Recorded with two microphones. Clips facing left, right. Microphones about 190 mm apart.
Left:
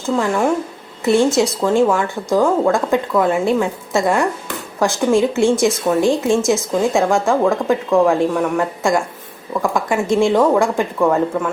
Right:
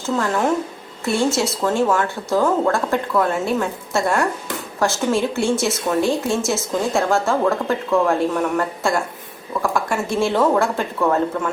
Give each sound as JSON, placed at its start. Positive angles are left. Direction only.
{"t": 0.2, "sound": "a woman's voice", "side_deg": 10}
{"t": 7.4, "sound": "speech", "side_deg": 0}
{"t": 7.9, "sound": "a woman's voice", "side_deg": 15}